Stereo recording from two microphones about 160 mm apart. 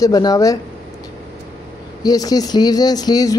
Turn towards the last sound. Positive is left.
turn(degrees=20)  # may be behind; listen again after turning